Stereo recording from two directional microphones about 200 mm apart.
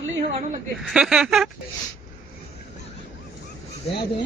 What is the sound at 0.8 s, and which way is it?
Speech, 5° right (ahead or behind).